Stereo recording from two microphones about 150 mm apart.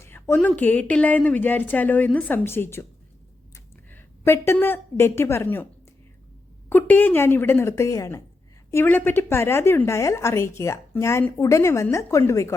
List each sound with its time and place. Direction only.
0.0 s a woman's voice: 15° left (ahead or behind)
3.5 s a sound: 15° left (ahead or behind)
4.6 s a woman's voice: 15° left (ahead or behind)
6.7 s a woman's voice: 10° left (ahead or behind)